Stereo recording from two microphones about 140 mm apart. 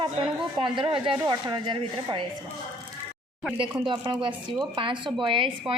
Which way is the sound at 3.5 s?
35° right (ahead or behind).